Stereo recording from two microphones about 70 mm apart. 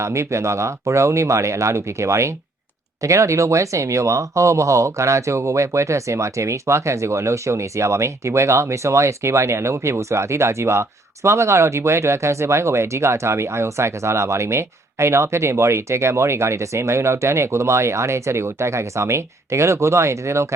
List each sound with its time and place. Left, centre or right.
0.0 s speech: right